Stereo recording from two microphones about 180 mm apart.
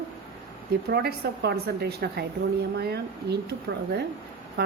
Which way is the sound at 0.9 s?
60° right (ahead or behind).